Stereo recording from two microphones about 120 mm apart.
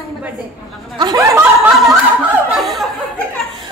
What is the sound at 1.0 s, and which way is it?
Speech, 35° right (ahead or behind).